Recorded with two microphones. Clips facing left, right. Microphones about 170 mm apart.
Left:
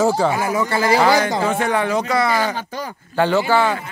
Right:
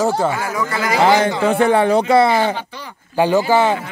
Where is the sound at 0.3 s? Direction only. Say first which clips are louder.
Left 2 dB; 25° left (ahead or behind).